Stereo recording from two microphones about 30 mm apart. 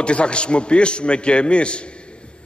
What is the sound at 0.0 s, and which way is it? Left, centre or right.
A man's voice, left.